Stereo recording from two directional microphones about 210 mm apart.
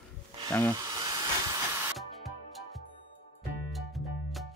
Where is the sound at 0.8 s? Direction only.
20° right (ahead or behind).